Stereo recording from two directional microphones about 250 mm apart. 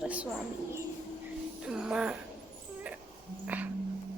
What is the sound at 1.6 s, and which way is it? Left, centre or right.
Speech, centre.